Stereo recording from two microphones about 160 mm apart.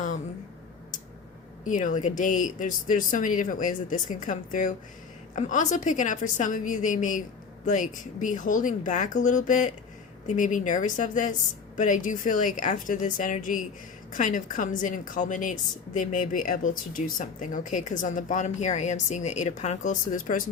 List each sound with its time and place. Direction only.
1.6 s a woman's voice: 55° left (ahead or behind)